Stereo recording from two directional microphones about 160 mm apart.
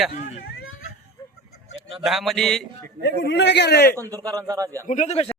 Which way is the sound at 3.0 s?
90° left.